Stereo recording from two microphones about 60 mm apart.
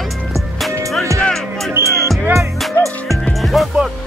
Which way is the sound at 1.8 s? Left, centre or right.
Right.